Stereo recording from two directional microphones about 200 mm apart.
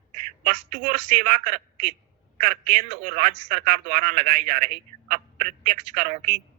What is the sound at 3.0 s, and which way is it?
A man's voice, 40° right (ahead or behind).